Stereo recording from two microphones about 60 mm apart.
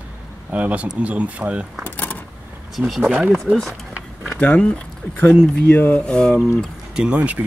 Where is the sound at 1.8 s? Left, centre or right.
Left.